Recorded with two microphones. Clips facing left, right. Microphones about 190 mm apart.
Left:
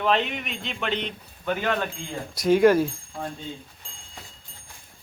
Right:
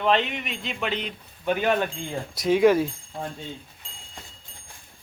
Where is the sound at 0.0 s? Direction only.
Centre (ahead or behind).